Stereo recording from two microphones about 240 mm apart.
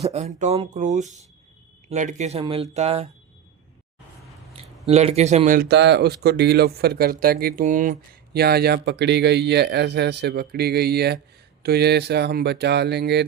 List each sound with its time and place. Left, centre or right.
0.0 s speech: right
4.5 s speech: right